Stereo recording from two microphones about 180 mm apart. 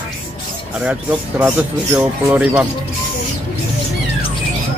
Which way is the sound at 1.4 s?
10° right (ahead or behind).